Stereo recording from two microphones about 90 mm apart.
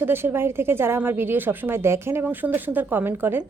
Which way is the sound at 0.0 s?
25° right (ahead or behind).